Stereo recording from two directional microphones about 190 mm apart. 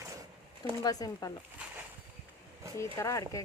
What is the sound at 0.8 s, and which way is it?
Speech, 20° left (ahead or behind).